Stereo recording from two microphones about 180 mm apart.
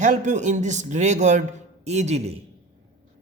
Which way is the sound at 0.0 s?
40° right (ahead or behind).